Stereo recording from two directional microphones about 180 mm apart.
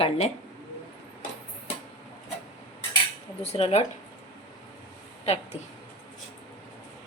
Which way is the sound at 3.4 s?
35° left (ahead or behind).